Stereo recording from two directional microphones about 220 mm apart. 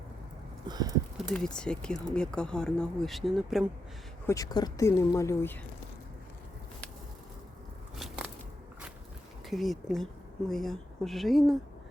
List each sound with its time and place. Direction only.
0.7 s a sound: 15° right (ahead or behind)
1.3 s speech: 5° left (ahead or behind)
4.3 s speech: 15° left (ahead or behind)
7.9 s biting: centre (ahead or behind)
9.5 s speech: centre (ahead or behind)